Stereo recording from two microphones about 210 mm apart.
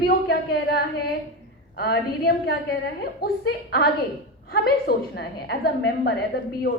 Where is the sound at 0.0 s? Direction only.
50° left (ahead or behind).